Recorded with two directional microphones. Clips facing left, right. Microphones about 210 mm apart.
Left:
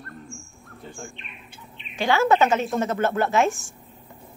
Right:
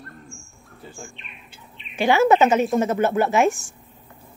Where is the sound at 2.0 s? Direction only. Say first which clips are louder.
Right 3 dB; 15° right (ahead or behind).